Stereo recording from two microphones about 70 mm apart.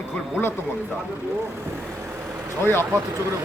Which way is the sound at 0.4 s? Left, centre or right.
Left.